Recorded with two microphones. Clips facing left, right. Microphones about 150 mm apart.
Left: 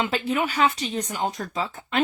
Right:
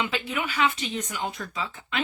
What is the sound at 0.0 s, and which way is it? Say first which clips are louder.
Speech: left 5 dB; 40° left (ahead or behind).